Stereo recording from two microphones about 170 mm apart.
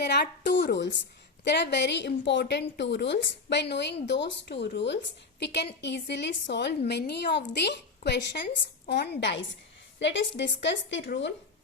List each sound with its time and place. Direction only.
0.0 s a woman's voice: 80° left